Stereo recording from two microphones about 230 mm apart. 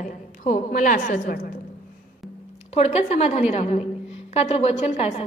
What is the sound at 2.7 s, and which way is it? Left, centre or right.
A woman's voice, left.